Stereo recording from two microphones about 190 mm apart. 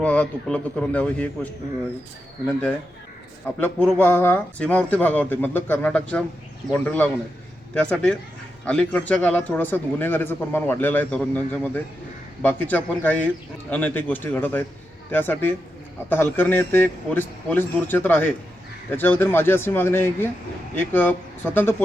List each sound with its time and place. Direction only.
0.0 s speech: 5° left (ahead or behind)
2.5 s speech: 5° left (ahead or behind)